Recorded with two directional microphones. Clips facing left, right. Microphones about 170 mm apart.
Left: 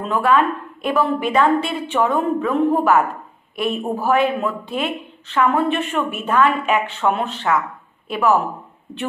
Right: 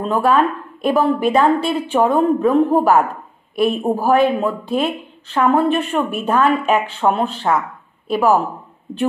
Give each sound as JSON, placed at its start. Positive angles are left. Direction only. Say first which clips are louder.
{"t": 0.0, "sound": "a woman's voice", "louder": "right 2 dB", "side_deg": -35}